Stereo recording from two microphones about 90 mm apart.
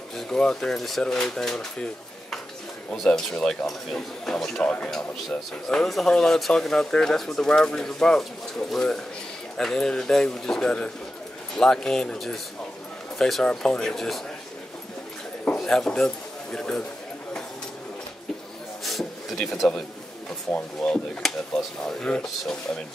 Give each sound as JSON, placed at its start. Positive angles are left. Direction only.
{"t": 0.1, "sound": "speech", "side_deg": 10}
{"t": 2.9, "sound": "speech", "side_deg": 10}
{"t": 4.6, "sound": "speech", "side_deg": 15}
{"t": 5.7, "sound": "speech", "side_deg": 5}
{"t": 15.4, "sound": "a sound", "side_deg": 5}
{"t": 16.5, "sound": "speech", "side_deg": 5}
{"t": 18.9, "sound": "a sound", "side_deg": 5}
{"t": 20.8, "sound": "speech", "side_deg": 10}